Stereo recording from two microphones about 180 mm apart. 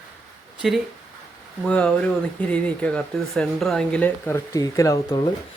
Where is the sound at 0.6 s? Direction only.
5° right (ahead or behind).